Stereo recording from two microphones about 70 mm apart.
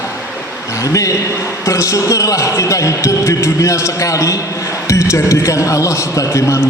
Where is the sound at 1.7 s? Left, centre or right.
Left.